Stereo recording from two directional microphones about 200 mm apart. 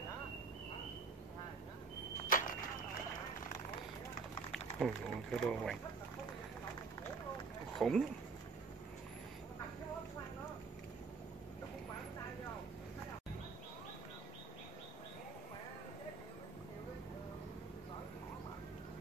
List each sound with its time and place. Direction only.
2.2 s a sound: 45° left (ahead or behind)
4.5 s speech: centre (ahead or behind)
7.8 s speech: centre (ahead or behind)